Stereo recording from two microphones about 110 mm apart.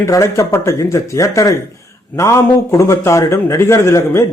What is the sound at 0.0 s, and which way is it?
Speech, 25° left (ahead or behind).